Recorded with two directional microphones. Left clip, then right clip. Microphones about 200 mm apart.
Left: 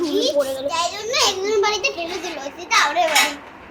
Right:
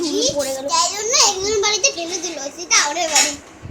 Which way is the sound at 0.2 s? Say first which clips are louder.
Left 2 dB; 10° right (ahead or behind).